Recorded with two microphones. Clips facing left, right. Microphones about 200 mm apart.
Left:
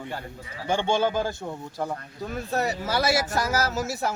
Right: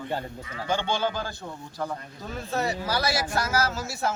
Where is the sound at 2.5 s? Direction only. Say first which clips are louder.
Left 1 dB; 20° left (ahead or behind).